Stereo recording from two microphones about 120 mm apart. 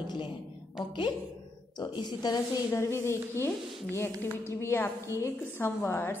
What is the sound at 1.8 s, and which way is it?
Speech, 35° left (ahead or behind).